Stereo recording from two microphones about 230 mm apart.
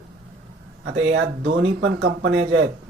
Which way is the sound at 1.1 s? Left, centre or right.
Right.